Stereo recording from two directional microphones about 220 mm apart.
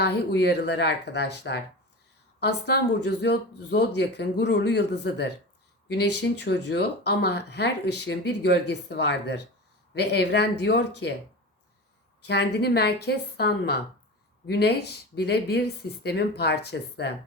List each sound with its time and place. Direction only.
0.0 s speech: 50° left (ahead or behind)
12.2 s speech: 50° left (ahead or behind)